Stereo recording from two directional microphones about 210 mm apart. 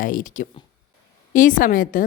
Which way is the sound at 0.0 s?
40° left (ahead or behind).